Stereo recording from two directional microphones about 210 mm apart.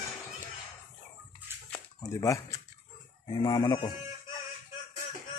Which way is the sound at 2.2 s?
15° left (ahead or behind).